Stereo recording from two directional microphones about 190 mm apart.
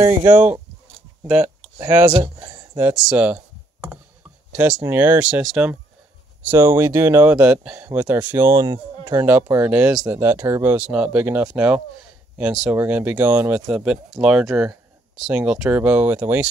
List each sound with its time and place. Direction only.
0.3 s speech: 10° right (ahead or behind)
2.0 s speech: 25° right (ahead or behind)
2.7 s speech: 10° right (ahead or behind)
4.8 s speech: 10° right (ahead or behind)